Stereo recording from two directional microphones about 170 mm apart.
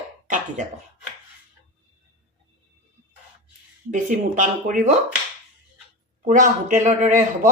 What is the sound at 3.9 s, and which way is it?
Speech, 50° right (ahead or behind).